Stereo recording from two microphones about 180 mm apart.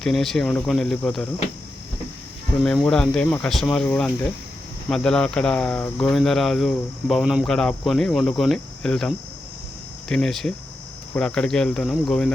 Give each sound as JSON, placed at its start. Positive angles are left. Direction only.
{"t": 0.0, "sound": "speech", "side_deg": 0}
{"t": 2.6, "sound": "speech", "side_deg": 5}